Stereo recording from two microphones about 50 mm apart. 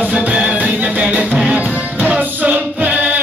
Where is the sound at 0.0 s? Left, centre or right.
Right.